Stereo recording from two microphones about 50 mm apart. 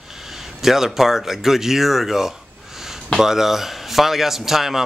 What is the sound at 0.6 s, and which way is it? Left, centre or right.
A man's voice, centre.